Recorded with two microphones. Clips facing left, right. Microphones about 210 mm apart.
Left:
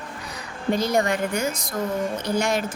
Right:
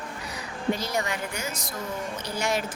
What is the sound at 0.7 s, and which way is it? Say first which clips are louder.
Speech: left 8 dB; 55° left (ahead or behind).